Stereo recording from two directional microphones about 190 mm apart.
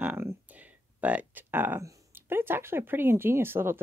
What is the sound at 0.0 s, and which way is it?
Speech, 10° right (ahead or behind).